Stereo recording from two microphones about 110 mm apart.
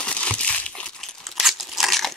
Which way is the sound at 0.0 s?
10° left (ahead or behind).